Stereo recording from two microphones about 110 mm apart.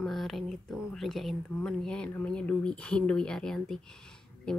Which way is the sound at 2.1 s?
10° left (ahead or behind).